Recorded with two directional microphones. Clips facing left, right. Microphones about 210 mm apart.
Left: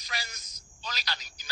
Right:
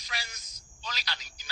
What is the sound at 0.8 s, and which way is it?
Speech, 40° left (ahead or behind).